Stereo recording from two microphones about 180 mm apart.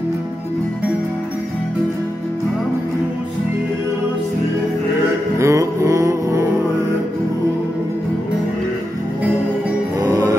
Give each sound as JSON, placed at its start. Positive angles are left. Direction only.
{"t": 5.4, "sound": "music", "side_deg": -15}
{"t": 9.9, "sound": "music", "side_deg": -15}